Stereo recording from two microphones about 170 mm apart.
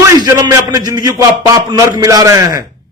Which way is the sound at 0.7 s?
20° right (ahead or behind).